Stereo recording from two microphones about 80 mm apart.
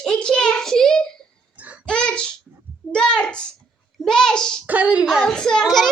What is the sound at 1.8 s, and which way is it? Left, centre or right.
Child singing, centre.